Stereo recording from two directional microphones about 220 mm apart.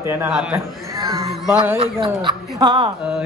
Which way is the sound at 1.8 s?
25° right (ahead or behind).